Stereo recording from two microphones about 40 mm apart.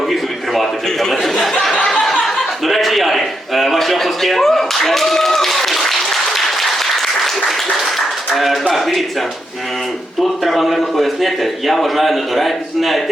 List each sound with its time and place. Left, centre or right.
0.1 s a sound: centre
1.1 s speech: centre
1.9 s chuckle: centre
8.7 s a man's voice: centre
10.2 s a man's voice: centre